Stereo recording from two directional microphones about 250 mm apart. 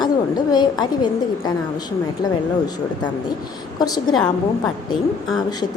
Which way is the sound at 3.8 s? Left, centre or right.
Centre.